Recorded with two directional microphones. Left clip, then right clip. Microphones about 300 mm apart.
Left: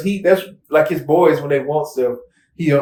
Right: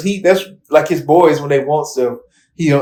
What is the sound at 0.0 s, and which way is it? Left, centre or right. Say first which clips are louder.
Speech: right 2 dB; centre.